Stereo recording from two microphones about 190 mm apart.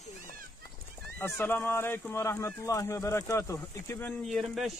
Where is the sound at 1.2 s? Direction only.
10° left (ahead or behind).